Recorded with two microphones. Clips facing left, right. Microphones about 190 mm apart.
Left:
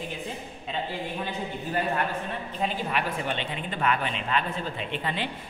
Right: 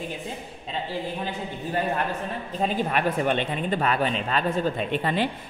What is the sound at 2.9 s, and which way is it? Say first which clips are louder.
Speech: right 6 dB; 50° right (ahead or behind).